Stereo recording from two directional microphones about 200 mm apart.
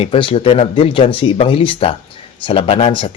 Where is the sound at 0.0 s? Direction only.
25° left (ahead or behind).